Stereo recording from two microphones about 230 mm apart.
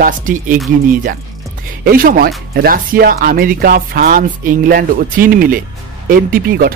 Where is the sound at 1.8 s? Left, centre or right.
Right.